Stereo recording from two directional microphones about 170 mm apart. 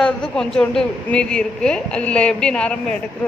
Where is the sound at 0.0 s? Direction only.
5° left (ahead or behind).